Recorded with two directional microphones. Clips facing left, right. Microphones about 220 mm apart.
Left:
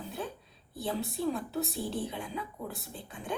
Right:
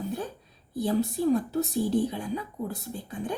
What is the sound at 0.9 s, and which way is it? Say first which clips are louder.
Speech: right 8 dB; 45° right (ahead or behind).